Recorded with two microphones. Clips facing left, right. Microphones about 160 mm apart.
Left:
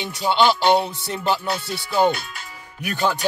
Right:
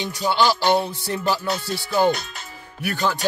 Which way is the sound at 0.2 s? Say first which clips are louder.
Left 2 dB; 20° left (ahead or behind).